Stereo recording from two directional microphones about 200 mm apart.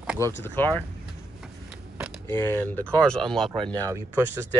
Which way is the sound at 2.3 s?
10° left (ahead or behind).